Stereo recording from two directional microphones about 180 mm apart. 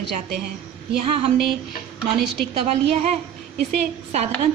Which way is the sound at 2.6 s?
35° right (ahead or behind).